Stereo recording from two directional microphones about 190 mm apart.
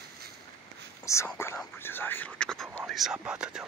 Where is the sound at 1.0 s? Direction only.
15° left (ahead or behind); by 3.6 s 5° right (ahead or behind).